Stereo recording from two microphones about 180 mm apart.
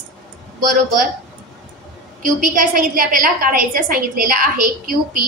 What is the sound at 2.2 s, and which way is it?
A woman's voice, 50° right (ahead or behind).